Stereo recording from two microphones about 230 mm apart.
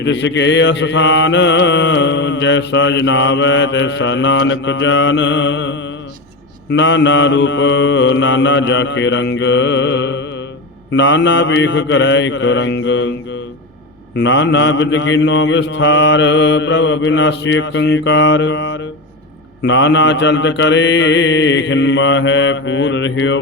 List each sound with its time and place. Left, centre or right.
0.0 s mantra: left
6.7 s mantra: left
14.2 s mantra: left